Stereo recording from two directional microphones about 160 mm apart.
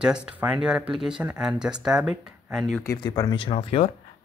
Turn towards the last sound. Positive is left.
turn(degrees=40)  # may be behind; listen again after turning